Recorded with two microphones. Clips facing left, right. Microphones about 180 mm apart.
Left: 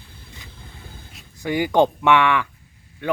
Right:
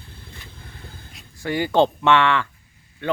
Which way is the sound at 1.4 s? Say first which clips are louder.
Left 1 dB; 15° left (ahead or behind).